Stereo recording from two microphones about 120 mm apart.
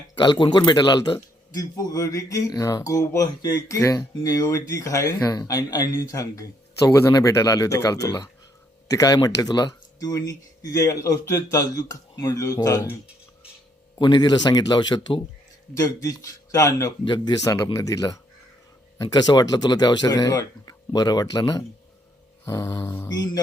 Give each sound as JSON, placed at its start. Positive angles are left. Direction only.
{"t": 0.2, "sound": "speech", "side_deg": 40}
{"t": 14.0, "sound": "speech", "side_deg": 35}